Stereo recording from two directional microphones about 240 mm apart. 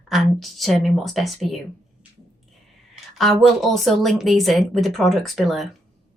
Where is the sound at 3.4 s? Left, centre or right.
Centre.